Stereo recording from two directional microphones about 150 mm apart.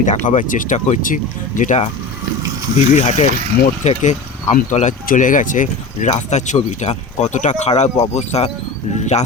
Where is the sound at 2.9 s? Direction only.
50° left (ahead or behind).